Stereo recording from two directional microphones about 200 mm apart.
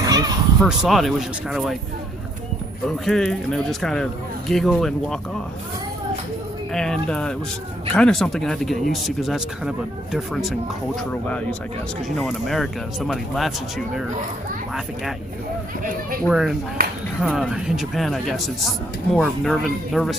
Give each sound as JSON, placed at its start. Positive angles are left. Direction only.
{"t": 0.0, "sound": "a sound", "side_deg": -20}
{"t": 0.6, "sound": "speech", "side_deg": 0}
{"t": 2.8, "sound": "speech", "side_deg": 0}
{"t": 6.7, "sound": "speech", "side_deg": 5}
{"t": 15.8, "sound": "speech", "side_deg": -40}
{"t": 16.2, "sound": "speech", "side_deg": 0}